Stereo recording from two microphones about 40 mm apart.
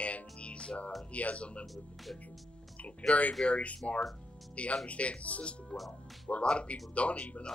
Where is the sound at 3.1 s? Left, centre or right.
Left.